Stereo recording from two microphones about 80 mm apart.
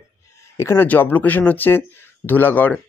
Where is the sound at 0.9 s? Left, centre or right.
Left.